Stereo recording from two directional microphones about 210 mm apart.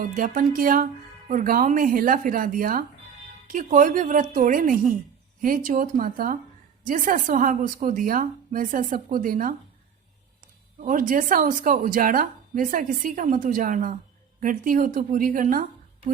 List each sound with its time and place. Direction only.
0.0 s a woman's voice: 40° right (ahead or behind)
10.8 s a woman's voice: 40° right (ahead or behind)